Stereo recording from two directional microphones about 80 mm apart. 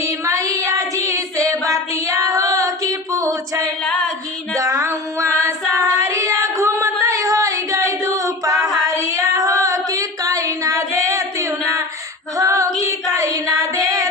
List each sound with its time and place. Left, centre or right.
0.0 s child singing: right
12.4 s female singing: right
12.8 s child singing: right